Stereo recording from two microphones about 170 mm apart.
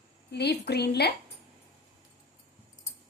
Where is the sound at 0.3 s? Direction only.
75° left (ahead or behind).